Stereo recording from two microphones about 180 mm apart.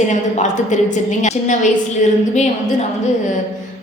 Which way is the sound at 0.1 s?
40° left (ahead or behind).